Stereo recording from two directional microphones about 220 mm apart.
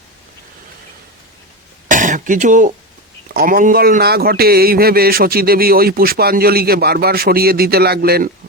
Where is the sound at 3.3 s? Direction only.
40° right (ahead or behind).